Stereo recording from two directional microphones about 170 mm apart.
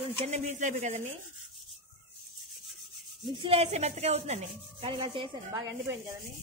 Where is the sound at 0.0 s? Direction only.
40° right (ahead or behind).